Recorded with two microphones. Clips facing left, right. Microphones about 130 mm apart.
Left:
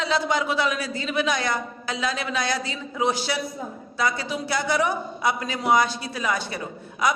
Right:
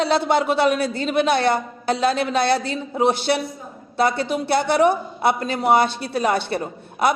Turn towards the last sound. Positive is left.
turn(degrees=-55)  # may be behind; listen again after turning